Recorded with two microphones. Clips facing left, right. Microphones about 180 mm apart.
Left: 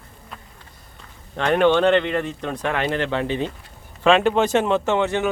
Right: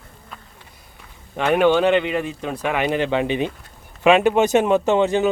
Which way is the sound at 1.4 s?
10° right (ahead or behind).